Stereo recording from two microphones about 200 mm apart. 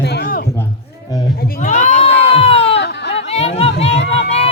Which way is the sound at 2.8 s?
60° left (ahead or behind).